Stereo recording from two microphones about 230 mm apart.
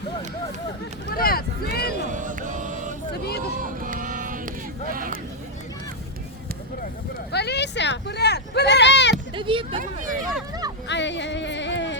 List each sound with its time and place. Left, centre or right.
1.1 s speech: left
2.0 s mantra: right
3.6 s vehicle: right
7.3 s speech: left
9.3 s speech: right
9.7 s speech: right
10.8 s a sound: left